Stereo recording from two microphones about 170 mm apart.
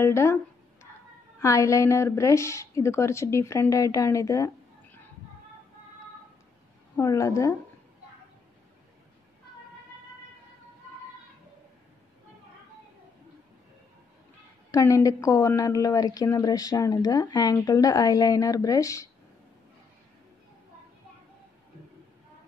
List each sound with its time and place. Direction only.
0.0 s a woman's voice: 15° left (ahead or behind)
1.4 s a woman's voice: 15° left (ahead or behind)
7.0 s a woman's voice: 20° left (ahead or behind)
14.7 s a woman's voice: 20° left (ahead or behind)